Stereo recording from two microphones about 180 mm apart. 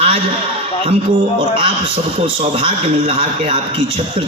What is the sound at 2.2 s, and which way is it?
A man's voice, 30° right (ahead or behind).